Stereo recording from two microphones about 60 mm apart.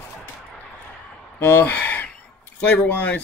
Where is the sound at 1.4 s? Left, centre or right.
Left.